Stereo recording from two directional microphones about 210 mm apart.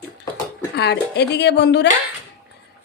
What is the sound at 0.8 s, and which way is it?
Speech, 55° left (ahead or behind).